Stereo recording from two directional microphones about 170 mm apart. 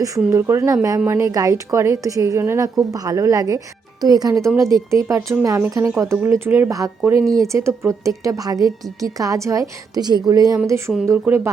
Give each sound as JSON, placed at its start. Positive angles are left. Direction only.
{"t": 0.3, "sound": "a woman's voice", "side_deg": -15}